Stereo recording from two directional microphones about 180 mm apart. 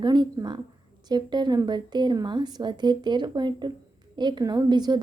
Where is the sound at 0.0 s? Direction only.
25° right (ahead or behind).